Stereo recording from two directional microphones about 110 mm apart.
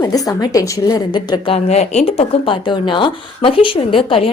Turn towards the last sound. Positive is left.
turn(degrees=55)  # may be behind; listen again after turning